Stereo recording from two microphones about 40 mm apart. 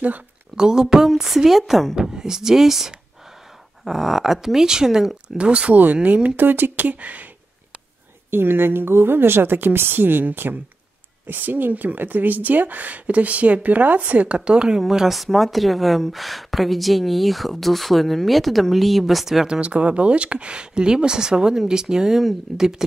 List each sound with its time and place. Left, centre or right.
0.6 s a woman's voice: centre
2.0 s a woman's voice: centre
5.4 s speech: right
6.3 s speech: right
8.3 s a woman's voice: right
14.8 s a woman's voice: centre
19.6 s a woman's voice: right; by 22.8 s centre